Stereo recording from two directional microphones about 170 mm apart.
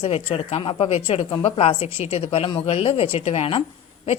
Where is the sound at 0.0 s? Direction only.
35° left (ahead or behind).